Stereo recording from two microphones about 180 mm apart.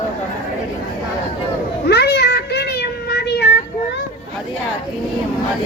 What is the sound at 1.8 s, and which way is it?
Child singing, 65° left (ahead or behind).